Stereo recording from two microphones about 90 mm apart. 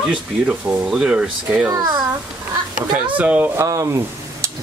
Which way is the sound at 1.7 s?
45° right (ahead or behind).